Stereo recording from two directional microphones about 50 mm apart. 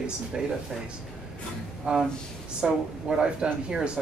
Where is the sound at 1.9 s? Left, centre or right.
Right.